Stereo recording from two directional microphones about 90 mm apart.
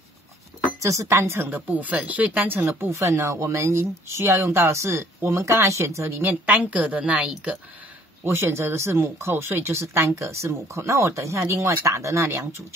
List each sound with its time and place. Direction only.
0.8 s speech: 35° right (ahead or behind)
1.7 s speech: 15° right (ahead or behind); by 6.2 s 30° right (ahead or behind)
6.2 s a woman's voice: 20° right (ahead or behind)
8.3 s speech: 30° right (ahead or behind)